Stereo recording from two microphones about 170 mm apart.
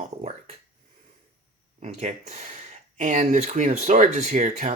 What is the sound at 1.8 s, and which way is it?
Speech, 40° right (ahead or behind).